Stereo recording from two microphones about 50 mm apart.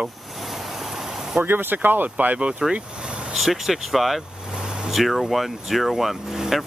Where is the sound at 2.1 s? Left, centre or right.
Right.